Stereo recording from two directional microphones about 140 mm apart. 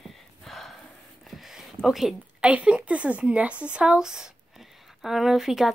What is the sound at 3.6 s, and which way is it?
Speech, 10° right (ahead or behind).